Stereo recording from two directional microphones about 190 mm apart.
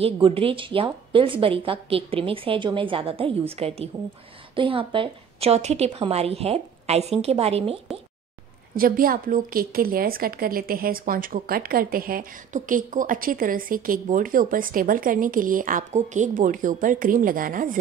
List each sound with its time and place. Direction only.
0.0 s a woman's voice: 30° right (ahead or behind)
8.7 s a woman's voice: 50° right (ahead or behind)